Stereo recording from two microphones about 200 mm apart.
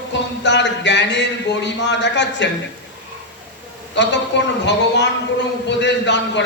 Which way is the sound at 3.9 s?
60° left (ahead or behind).